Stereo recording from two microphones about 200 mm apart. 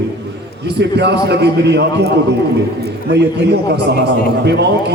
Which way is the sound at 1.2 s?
55° right (ahead or behind).